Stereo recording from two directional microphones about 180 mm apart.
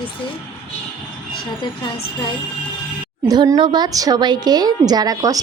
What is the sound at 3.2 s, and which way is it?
A woman's voice, 20° right (ahead or behind).